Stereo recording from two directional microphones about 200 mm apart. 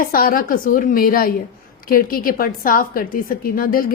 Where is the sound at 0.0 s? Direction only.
45° left (ahead or behind).